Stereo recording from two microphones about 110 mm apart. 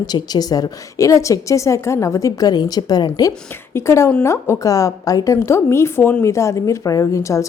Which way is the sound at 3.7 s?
25° left (ahead or behind).